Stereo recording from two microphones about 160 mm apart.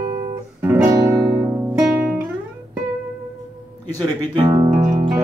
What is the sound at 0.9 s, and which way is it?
Music, 20° right (ahead or behind).